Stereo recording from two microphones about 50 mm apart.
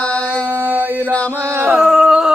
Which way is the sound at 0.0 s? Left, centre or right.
Left.